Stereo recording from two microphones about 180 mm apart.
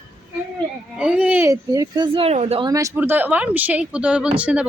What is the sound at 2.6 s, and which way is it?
Speech, 20° right (ahead or behind).